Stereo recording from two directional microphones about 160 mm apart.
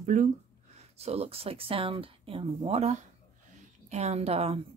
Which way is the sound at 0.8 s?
40° right (ahead or behind).